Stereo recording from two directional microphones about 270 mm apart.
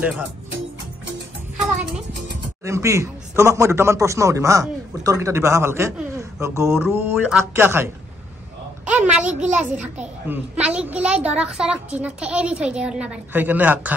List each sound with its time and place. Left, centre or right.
0.0 s a woman's voice: centre
2.6 s a woman's voice: centre